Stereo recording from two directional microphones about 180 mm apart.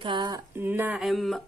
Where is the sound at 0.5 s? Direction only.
10° right (ahead or behind).